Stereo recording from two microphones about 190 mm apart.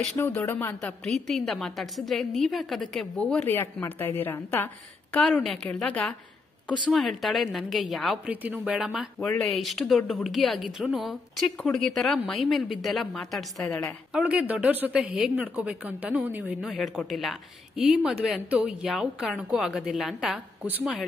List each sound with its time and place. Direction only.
0.2 s a woman's voice: 10° left (ahead or behind); by 16.7 s 10° right (ahead or behind)
16.7 s a woman's voice: centre (ahead or behind)